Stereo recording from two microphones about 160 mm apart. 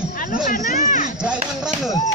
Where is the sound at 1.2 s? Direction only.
5° right (ahead or behind).